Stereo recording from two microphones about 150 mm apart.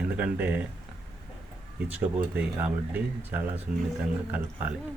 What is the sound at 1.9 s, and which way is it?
Speech, 10° right (ahead or behind).